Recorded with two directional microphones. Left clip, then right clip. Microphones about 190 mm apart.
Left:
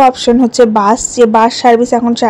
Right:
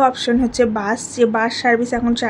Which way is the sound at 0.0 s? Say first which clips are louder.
Left 8 dB; 35° left (ahead or behind).